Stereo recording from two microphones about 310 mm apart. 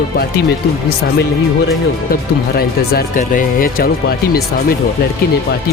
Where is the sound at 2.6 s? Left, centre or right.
Left.